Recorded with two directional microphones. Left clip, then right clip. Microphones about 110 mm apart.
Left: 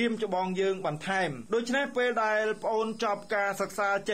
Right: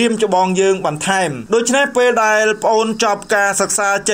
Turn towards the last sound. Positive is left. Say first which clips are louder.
# right 13 dB
turn(degrees=-40)  # may be behind; listen again after turning